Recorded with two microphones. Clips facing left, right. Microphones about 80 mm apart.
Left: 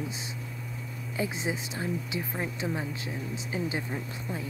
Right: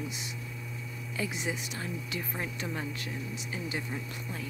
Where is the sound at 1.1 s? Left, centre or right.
Left.